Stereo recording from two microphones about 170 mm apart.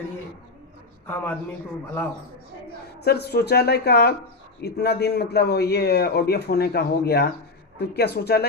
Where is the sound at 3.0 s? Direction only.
70° left (ahead or behind).